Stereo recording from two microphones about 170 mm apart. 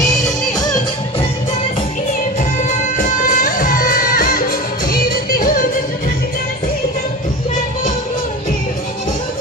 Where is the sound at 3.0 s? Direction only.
55° left (ahead or behind).